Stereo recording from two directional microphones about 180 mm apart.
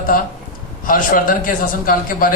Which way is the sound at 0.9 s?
50° left (ahead or behind).